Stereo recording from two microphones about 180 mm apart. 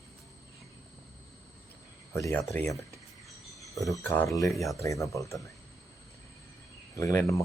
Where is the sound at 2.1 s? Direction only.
15° left (ahead or behind).